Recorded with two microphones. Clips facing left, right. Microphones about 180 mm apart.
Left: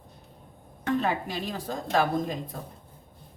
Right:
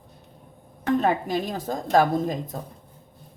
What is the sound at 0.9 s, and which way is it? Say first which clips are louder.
A woman's voice: right 5 dB; 45° right (ahead or behind).